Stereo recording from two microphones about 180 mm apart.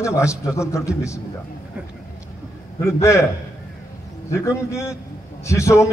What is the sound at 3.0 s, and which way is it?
Speech, 15° left (ahead or behind).